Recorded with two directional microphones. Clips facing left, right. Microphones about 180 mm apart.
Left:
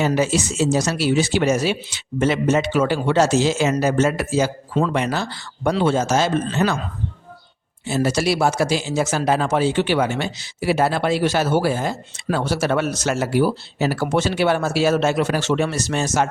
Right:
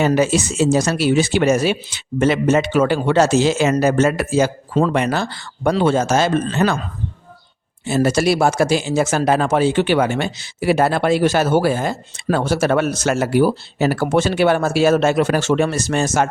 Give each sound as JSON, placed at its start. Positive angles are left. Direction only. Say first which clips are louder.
{"t": 0.0, "sound": "speech", "louder": "right 3 dB", "side_deg": -55}
{"t": 7.9, "sound": "speech", "louder": "right 4 dB", "side_deg": -50}